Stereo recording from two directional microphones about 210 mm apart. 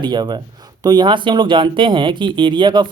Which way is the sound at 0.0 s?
20° right (ahead or behind).